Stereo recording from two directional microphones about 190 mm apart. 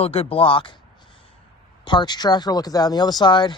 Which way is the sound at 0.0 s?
30° left (ahead or behind).